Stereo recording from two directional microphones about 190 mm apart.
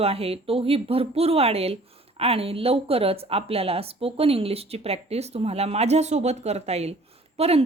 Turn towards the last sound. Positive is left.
turn(degrees=-30)  # may be behind; listen again after turning